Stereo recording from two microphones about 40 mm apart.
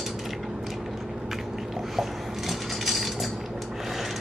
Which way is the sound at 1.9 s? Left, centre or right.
Centre.